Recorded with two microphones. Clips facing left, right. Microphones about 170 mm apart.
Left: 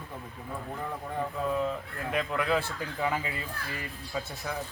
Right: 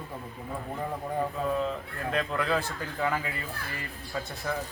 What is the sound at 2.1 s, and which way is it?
A man's voice, 10° left (ahead or behind).